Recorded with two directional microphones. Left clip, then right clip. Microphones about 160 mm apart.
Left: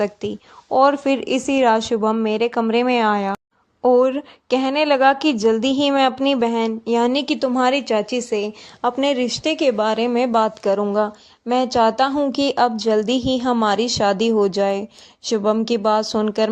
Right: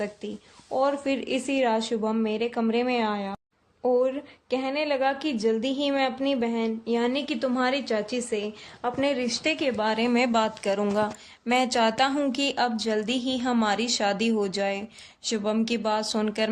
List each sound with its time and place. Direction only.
0.7 s speech: 30° left (ahead or behind)